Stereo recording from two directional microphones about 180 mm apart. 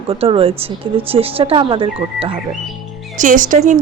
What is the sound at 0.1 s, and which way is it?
Speech, 30° right (ahead or behind).